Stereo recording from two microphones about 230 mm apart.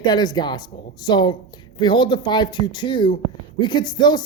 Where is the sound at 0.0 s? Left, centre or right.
Centre.